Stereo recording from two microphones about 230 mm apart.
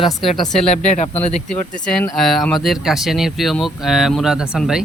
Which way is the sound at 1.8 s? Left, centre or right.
Centre.